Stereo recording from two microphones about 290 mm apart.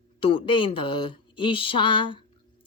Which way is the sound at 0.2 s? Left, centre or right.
Centre.